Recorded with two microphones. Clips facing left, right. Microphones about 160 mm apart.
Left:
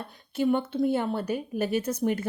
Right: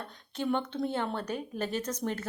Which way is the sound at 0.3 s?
5° left (ahead or behind).